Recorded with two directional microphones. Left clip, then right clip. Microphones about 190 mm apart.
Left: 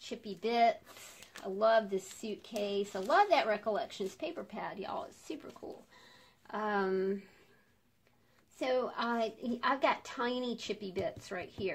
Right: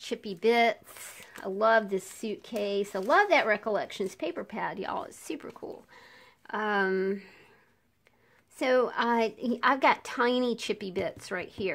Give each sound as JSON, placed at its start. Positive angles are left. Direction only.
{"t": 0.1, "sound": "a woman's voice", "side_deg": -40}
{"t": 8.5, "sound": "a woman's voice", "side_deg": -40}